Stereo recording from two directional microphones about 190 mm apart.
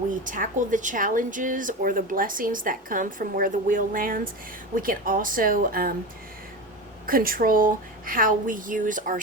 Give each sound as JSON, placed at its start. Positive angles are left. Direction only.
{"t": 0.1, "sound": "speech", "side_deg": -45}
{"t": 7.1, "sound": "speech", "side_deg": -50}